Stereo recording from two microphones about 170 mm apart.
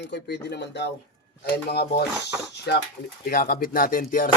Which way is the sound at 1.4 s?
70° left (ahead or behind).